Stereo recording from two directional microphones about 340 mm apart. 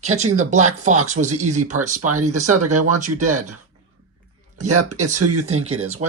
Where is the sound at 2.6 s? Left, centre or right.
Right.